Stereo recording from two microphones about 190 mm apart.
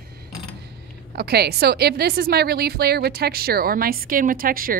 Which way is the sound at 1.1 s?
55° right (ahead or behind).